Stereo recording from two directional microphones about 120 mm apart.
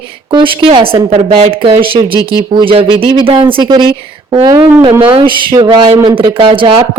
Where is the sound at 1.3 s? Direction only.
65° right (ahead or behind).